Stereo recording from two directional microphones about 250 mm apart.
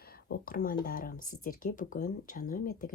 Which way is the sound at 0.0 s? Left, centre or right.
Left.